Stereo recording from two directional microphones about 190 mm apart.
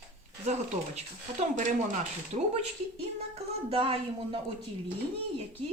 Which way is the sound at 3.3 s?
30° right (ahead or behind).